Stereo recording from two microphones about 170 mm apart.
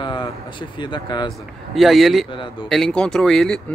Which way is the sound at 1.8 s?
Centre (ahead or behind).